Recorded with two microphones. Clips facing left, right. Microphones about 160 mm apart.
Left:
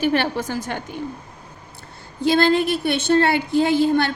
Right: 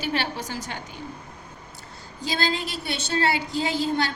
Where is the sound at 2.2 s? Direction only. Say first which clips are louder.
Left 11 dB; 60° left (ahead or behind).